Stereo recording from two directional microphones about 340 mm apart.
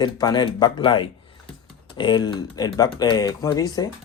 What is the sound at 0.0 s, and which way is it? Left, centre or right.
Speech, centre.